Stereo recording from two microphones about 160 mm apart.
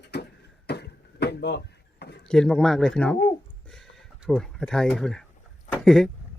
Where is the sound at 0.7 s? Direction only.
90° left.